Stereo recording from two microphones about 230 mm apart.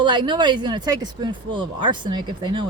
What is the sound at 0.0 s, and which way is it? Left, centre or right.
A woman's voice, centre.